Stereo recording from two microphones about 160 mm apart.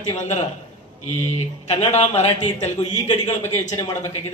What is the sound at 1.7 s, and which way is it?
Speech, 40° left (ahead or behind).